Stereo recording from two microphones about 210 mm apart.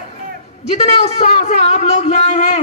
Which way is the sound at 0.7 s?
30° left (ahead or behind).